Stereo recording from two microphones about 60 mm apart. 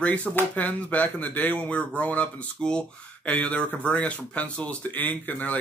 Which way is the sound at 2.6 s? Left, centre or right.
Centre.